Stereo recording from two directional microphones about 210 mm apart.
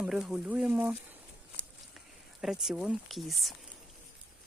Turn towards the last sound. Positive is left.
turn(degrees=0)  # may be behind; listen again after turning